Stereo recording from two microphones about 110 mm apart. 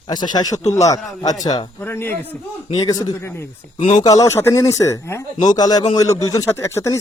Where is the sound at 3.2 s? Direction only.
25° left (ahead or behind).